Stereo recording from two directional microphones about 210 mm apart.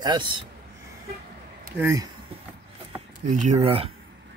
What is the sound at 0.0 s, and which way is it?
Speech, 20° right (ahead or behind).